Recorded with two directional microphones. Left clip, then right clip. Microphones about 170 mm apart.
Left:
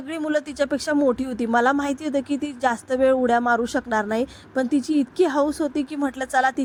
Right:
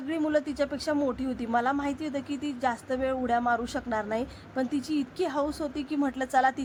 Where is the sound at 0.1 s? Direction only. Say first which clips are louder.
Left 3 dB; 35° left (ahead or behind).